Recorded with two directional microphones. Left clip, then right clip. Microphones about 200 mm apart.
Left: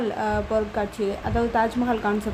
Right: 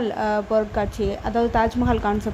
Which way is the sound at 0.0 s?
15° right (ahead or behind).